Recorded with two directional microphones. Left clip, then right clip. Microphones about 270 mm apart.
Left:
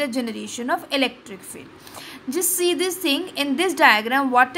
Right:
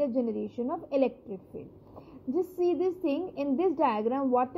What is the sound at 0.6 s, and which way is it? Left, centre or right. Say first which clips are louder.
Speech: left 8 dB; centre.